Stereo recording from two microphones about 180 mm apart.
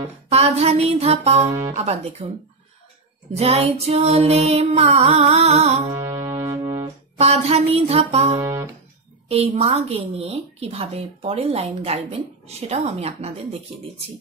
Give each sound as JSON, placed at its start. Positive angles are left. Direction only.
{"t": 0.3, "sound": "a woman's voice", "side_deg": -35}
{"t": 1.5, "sound": "speech", "side_deg": -15}
{"t": 1.8, "sound": "a woman's voice", "side_deg": -35}
{"t": 3.3, "sound": "a woman's voice", "side_deg": -35}
{"t": 5.9, "sound": "music", "side_deg": -25}
{"t": 7.2, "sound": "a woman's voice", "side_deg": -35}
{"t": 8.4, "sound": "music", "side_deg": -20}
{"t": 9.3, "sound": "a woman's voice", "side_deg": -35}